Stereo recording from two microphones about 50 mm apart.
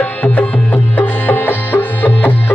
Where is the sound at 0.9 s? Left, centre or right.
Left.